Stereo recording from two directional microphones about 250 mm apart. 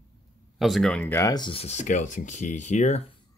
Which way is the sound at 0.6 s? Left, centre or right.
Centre.